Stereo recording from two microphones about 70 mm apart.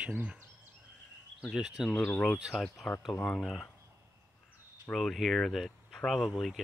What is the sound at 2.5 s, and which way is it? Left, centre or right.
Speech, centre.